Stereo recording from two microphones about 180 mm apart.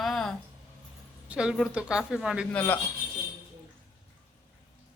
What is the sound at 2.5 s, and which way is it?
Speech, 10° left (ahead or behind).